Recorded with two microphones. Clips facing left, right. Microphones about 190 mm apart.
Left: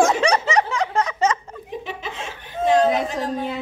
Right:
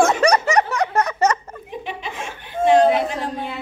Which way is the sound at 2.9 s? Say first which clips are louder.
Right 2 dB; 40° left (ahead or behind).